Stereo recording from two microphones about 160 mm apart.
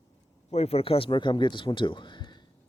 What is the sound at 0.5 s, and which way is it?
Speech, 40° left (ahead or behind).